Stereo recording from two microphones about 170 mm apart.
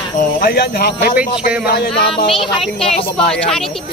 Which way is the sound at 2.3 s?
Centre (ahead or behind).